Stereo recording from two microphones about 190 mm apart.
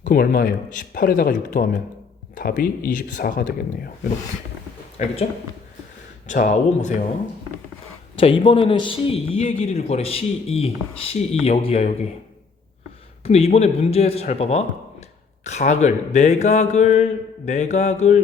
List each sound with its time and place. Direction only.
0.0 s speech: 45° left (ahead or behind)
5.0 s speech: 40° left (ahead or behind)
6.2 s speech: 40° left (ahead or behind)
8.1 s a man's voice: 30° left (ahead or behind)
9.3 s speech: 40° left (ahead or behind)
13.2 s speech: 35° left (ahead or behind)